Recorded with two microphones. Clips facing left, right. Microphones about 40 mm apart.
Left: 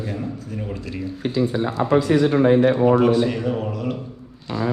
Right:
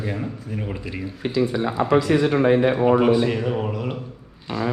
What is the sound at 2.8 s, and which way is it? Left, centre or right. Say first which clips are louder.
A man's voice: left 1 dB; centre.